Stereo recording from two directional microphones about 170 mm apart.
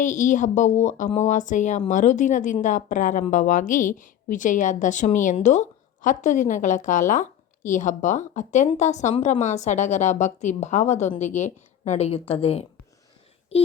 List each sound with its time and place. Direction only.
0.0 s a woman's voice: 45° left (ahead or behind)